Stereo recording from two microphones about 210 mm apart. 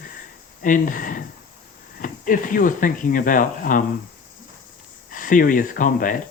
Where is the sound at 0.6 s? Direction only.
40° left (ahead or behind).